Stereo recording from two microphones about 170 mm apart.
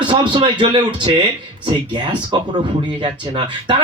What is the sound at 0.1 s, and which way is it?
Speech, 30° right (ahead or behind).